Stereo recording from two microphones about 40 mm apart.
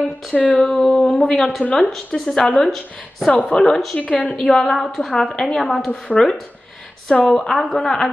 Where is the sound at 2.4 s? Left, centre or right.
Left.